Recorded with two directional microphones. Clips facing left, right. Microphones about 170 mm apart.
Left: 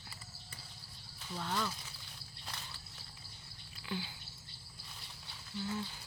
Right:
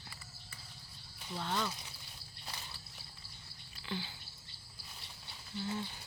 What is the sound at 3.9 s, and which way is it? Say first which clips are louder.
Drip: even; 10° left (ahead or behind).